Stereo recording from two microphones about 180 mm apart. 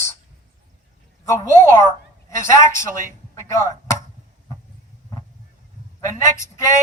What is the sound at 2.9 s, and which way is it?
Speech, 45° right (ahead or behind).